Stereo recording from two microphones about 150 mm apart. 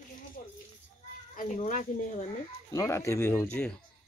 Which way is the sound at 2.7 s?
20° left (ahead or behind).